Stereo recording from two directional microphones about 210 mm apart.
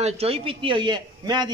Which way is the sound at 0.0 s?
30° right (ahead or behind).